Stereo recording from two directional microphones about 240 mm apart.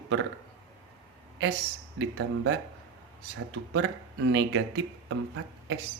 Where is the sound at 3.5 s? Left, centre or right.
Right.